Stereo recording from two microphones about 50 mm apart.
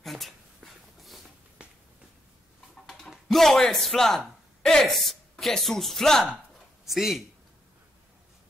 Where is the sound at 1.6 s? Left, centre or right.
Right.